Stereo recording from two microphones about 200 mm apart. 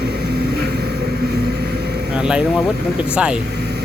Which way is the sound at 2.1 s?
5° right (ahead or behind).